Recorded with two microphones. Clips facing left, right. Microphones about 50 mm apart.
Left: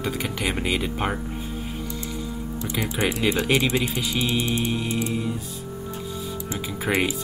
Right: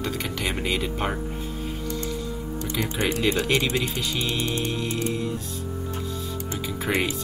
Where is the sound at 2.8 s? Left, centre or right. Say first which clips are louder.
Left 1 dB; centre.